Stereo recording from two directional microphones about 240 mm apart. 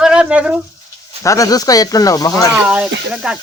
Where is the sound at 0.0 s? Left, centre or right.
Centre.